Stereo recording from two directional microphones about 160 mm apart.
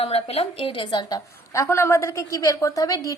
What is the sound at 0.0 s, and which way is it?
A woman's voice, 40° left (ahead or behind).